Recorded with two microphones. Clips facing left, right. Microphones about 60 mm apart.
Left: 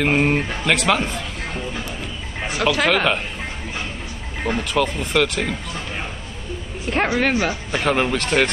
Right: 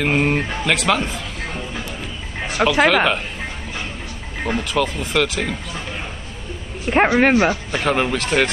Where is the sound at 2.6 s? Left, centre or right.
Centre.